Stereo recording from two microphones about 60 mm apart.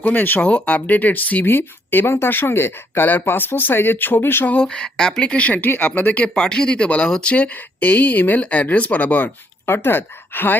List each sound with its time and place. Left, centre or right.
0.0 s speech: left
4.6 s speech: centre; by 10.6 s left